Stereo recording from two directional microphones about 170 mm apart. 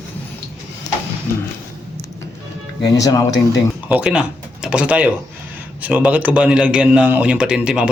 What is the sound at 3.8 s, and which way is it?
A man's voice, 5° right (ahead or behind).